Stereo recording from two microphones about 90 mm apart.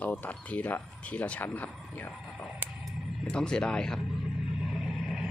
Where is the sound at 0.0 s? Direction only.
20° left (ahead or behind).